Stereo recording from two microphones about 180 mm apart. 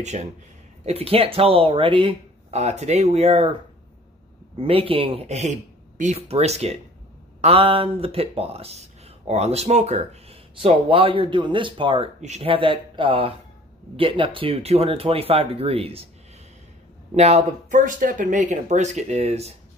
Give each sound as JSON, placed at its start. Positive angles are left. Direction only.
{"t": 0.0, "sound": "speech", "side_deg": -40}
{"t": 4.6, "sound": "speech", "side_deg": -30}
{"t": 17.1, "sound": "speech", "side_deg": -35}